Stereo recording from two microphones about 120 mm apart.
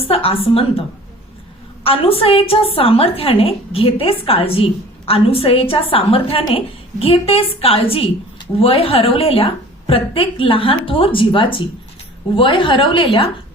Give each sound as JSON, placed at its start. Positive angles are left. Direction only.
{"t": 0.0, "sound": "a woman's voice", "side_deg": 55}
{"t": 1.8, "sound": "a woman's voice", "side_deg": 50}